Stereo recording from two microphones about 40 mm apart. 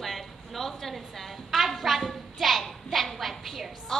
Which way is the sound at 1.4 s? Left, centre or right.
Centre.